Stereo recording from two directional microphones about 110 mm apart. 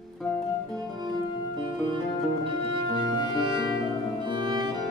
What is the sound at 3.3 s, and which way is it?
Music, 45° right (ahead or behind).